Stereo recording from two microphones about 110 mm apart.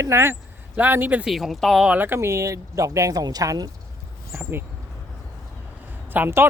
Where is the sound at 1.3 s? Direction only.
Centre (ahead or behind).